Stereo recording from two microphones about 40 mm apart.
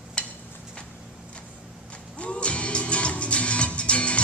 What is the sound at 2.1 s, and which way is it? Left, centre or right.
Music, left.